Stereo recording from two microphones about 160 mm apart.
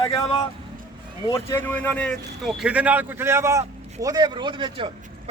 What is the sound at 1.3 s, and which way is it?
A man's voice, 15° left (ahead or behind).